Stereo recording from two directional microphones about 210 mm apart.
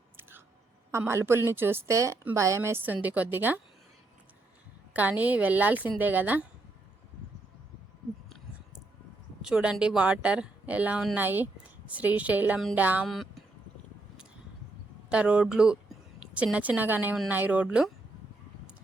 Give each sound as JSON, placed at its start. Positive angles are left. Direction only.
{"t": 0.2, "sound": "chewing", "side_deg": -10}
{"t": 0.9, "sound": "a woman's voice", "side_deg": -10}
{"t": 4.9, "sound": "a woman's voice", "side_deg": -5}
{"t": 9.4, "sound": "speech", "side_deg": -5}
{"t": 15.1, "sound": "a woman's voice", "side_deg": -5}